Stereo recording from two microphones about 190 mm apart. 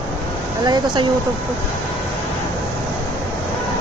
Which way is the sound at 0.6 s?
20° right (ahead or behind).